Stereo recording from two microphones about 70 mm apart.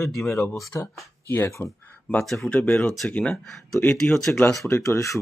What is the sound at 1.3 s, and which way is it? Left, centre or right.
Speech, left.